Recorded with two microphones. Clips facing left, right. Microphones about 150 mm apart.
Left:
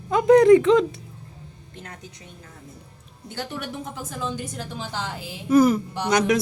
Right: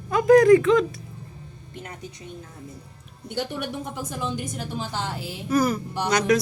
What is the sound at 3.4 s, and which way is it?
A woman's voice, 15° right (ahead or behind).